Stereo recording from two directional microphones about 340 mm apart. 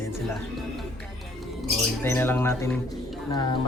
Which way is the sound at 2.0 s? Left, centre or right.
Centre.